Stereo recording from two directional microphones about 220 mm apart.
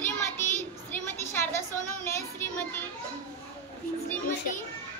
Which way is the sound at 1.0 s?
10° left (ahead or behind).